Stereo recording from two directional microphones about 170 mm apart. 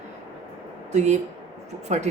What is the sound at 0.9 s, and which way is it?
A woman's voice, 40° right (ahead or behind).